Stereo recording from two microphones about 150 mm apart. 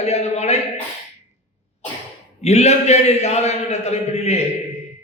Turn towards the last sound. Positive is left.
turn(degrees=45)  # may be behind; listen again after turning